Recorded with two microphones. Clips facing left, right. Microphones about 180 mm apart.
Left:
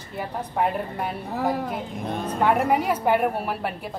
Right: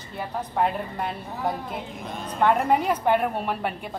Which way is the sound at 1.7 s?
50° left (ahead or behind).